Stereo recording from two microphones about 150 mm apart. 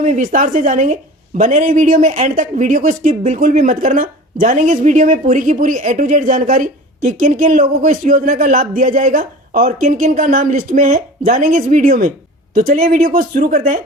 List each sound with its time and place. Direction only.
0.0 s speech: 60° right (ahead or behind)